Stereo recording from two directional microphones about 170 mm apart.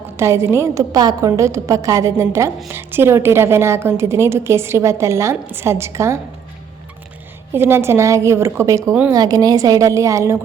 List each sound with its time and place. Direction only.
0.2 s a woman's voice: 15° right (ahead or behind)
7.5 s a woman's voice: 15° right (ahead or behind)